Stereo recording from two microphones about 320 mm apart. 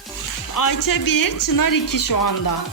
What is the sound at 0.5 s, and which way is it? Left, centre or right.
A child's voice, left.